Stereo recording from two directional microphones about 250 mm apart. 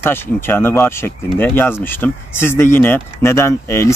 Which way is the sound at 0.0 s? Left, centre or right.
Centre.